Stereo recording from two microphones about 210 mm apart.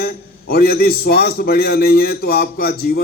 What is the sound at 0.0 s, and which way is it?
A man's voice, 45° left (ahead or behind).